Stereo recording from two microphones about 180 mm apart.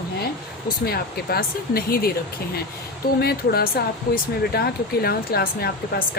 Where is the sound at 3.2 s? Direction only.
60° left (ahead or behind).